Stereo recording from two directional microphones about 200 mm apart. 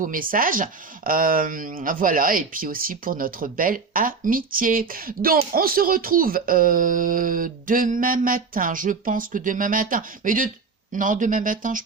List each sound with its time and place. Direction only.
0.0 s speech: 45° right (ahead or behind)